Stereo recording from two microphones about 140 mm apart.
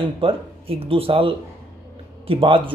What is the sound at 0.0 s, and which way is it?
Speech, 40° right (ahead or behind).